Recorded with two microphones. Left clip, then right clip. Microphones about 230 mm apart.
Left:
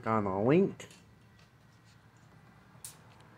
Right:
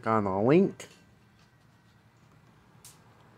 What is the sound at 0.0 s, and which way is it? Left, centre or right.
Speech, right.